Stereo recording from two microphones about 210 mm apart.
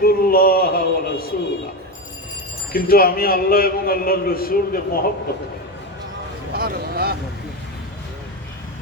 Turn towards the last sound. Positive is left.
turn(degrees=-45)  # may be behind; listen again after turning